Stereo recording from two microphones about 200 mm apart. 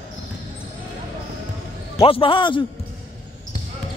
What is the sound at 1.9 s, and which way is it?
Speech, 25° left (ahead or behind).